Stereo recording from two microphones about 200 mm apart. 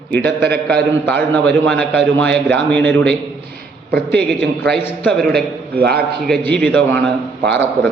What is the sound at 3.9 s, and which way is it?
Speech, 55° right (ahead or behind).